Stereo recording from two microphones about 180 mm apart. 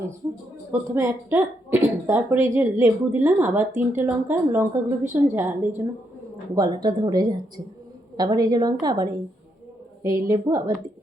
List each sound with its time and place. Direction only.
0.7 s a woman's voice: 15° right (ahead or behind)